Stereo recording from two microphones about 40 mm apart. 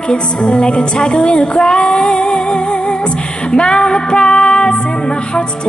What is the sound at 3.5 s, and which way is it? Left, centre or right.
Music, left.